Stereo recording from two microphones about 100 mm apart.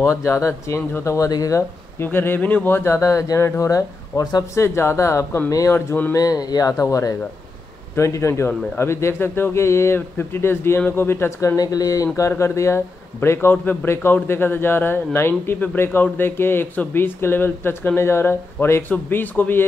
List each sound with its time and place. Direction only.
0.0 s a man's voice: 30° left (ahead or behind)
2.0 s a man's voice: 20° left (ahead or behind); by 4.5 s 40° left (ahead or behind)
4.6 s a man's voice: 25° left (ahead or behind)